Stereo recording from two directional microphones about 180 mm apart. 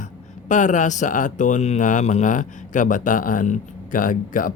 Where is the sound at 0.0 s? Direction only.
45° left (ahead or behind).